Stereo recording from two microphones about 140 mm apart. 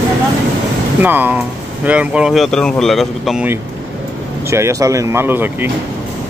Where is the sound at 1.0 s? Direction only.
15° right (ahead or behind).